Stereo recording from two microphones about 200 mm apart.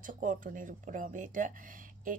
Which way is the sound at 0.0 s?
40° right (ahead or behind).